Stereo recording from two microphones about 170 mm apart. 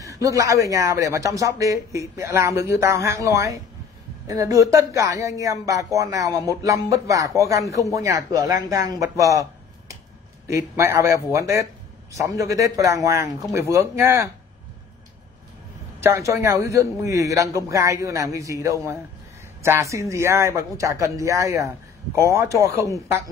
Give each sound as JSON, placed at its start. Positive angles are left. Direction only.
{"t": 0.0, "sound": "speech", "side_deg": -20}
{"t": 16.0, "sound": "speech", "side_deg": -15}